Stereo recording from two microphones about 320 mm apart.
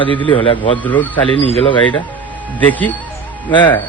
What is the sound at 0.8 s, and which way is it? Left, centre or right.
Speech, centre.